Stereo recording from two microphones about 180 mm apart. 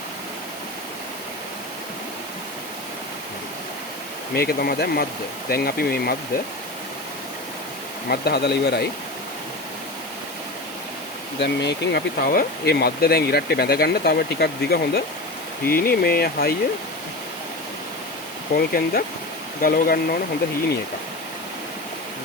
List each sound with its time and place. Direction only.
4.4 s speech: 60° left (ahead or behind)
8.1 s speech: 65° left (ahead or behind)
11.3 s speech: 70° left (ahead or behind)
18.5 s speech: 55° left (ahead or behind)